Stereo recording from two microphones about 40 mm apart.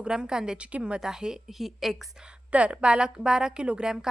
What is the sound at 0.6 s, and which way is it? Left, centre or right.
Speech, right.